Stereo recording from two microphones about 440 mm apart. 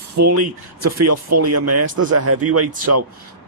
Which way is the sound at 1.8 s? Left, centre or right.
Right.